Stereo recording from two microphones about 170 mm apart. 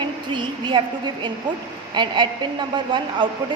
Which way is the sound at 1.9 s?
25° right (ahead or behind).